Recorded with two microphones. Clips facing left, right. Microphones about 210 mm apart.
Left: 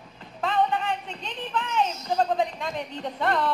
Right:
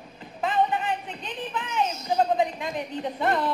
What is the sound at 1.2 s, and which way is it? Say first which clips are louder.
A woman's voice: left 1 dB; 5° right (ahead or behind).